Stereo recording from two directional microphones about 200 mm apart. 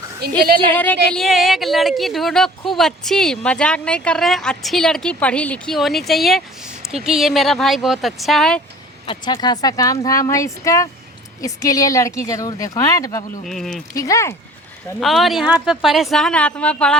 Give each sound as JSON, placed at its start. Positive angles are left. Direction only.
{"t": 0.2, "sound": "a woman's voice", "side_deg": -50}
{"t": 0.7, "sound": "a woman's voice", "side_deg": 10}
{"t": 9.0, "sound": "speech", "side_deg": 20}
{"t": 13.4, "sound": "a woman's voice", "side_deg": 0}
{"t": 13.9, "sound": "speech", "side_deg": 15}
{"t": 15.0, "sound": "a woman's voice", "side_deg": 0}